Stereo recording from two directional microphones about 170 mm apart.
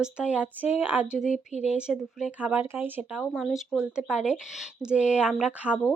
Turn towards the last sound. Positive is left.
turn(degrees=-5)  # may be behind; listen again after turning